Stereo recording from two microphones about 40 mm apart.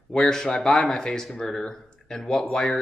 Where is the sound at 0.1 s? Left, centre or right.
Centre.